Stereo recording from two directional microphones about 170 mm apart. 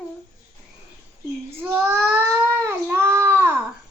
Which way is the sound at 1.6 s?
15° right (ahead or behind).